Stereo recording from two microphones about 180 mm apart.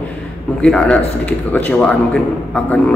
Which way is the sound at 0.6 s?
5° left (ahead or behind).